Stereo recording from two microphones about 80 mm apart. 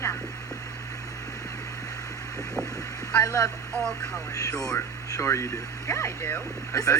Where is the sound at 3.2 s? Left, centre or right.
Left.